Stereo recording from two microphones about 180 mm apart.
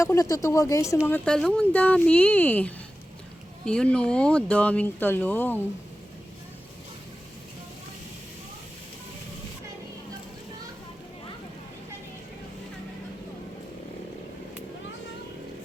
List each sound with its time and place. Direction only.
0.0 s speech: 15° left (ahead or behind)